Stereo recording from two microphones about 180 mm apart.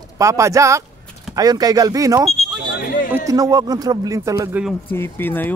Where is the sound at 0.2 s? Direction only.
15° right (ahead or behind).